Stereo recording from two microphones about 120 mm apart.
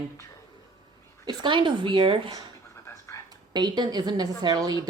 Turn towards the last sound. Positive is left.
turn(degrees=-35)  # may be behind; listen again after turning